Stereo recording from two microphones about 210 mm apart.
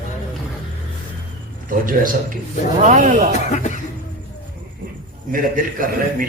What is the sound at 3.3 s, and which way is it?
Speech, 35° left (ahead or behind).